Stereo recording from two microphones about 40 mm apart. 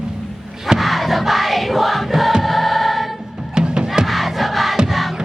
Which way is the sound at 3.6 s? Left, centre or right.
Right.